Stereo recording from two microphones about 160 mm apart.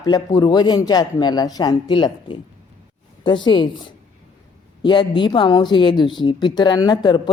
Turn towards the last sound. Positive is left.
turn(degrees=30)  # may be behind; listen again after turning